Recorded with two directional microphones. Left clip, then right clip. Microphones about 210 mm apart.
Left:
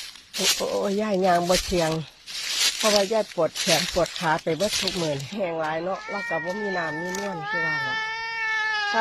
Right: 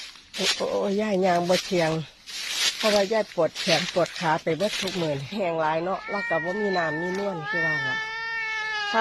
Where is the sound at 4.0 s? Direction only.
10° right (ahead or behind).